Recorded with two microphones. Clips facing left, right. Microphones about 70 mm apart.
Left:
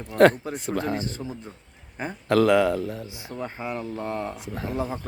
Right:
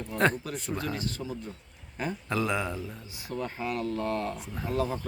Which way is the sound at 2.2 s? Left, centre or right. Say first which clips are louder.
Left 12 dB; left.